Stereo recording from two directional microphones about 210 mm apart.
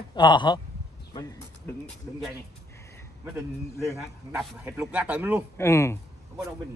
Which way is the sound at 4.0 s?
5° right (ahead or behind).